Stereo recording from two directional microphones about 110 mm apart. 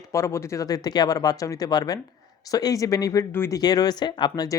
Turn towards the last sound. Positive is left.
turn(degrees=35)  # may be behind; listen again after turning